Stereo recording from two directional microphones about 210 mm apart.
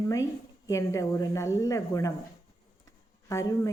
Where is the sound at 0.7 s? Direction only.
15° left (ahead or behind).